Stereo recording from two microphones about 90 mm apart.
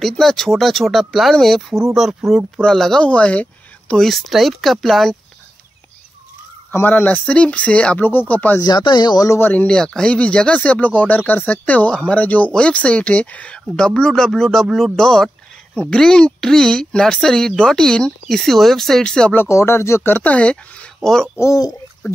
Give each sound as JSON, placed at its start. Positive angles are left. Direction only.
{"t": 0.2, "sound": "speech", "side_deg": 5}
{"t": 6.7, "sound": "speech", "side_deg": 25}
{"t": 8.5, "sound": "speech", "side_deg": 50}
{"t": 9.4, "sound": "speech", "side_deg": 20}
{"t": 19.3, "sound": "speech", "side_deg": 30}
{"t": 21.4, "sound": "speech", "side_deg": 40}